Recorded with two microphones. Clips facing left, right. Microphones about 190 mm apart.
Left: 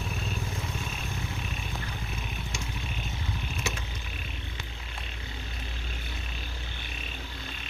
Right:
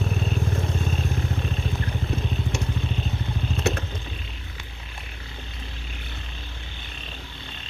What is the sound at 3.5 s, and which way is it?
Vehicle, 60° right (ahead or behind).